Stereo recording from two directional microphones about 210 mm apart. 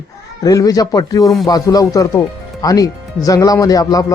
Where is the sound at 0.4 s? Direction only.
15° left (ahead or behind).